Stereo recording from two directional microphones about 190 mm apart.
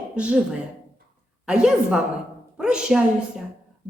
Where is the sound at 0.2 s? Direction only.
5° right (ahead or behind).